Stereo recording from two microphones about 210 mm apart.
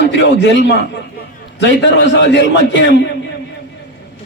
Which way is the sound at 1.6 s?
55° left (ahead or behind).